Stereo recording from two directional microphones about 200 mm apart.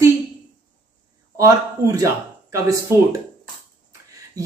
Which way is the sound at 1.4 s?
15° right (ahead or behind).